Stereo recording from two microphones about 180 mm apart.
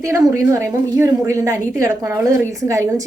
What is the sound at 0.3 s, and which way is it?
A woman's voice, 15° right (ahead or behind).